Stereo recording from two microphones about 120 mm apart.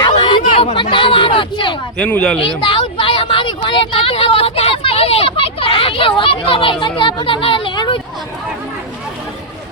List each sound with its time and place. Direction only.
0.0 s chatter: 40° left (ahead or behind)
0.5 s speech: 50° left (ahead or behind)
2.0 s speech: 10° left (ahead or behind)
2.6 s speech: 45° left (ahead or behind)